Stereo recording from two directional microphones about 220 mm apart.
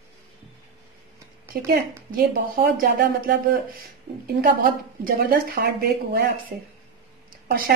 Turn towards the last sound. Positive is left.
turn(degrees=-45)  # may be behind; listen again after turning